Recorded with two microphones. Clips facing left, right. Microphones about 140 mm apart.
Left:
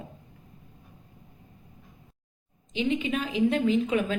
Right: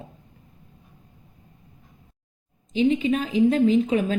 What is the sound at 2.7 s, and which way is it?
A woman's voice, 35° right (ahead or behind).